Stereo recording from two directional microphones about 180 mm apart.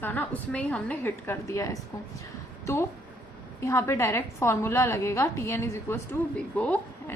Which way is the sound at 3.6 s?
15° left (ahead or behind).